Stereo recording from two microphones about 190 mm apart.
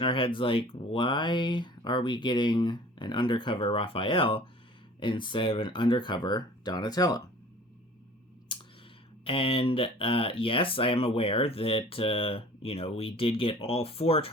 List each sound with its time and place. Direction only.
0.0 s speech: 25° left (ahead or behind)
8.5 s clicking: 25° left (ahead or behind)
9.2 s speech: 30° left (ahead or behind)